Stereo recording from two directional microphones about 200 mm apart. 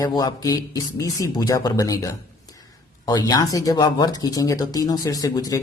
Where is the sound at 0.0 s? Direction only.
20° left (ahead or behind).